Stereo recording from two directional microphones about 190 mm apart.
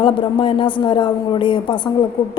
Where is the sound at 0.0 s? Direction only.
25° left (ahead or behind).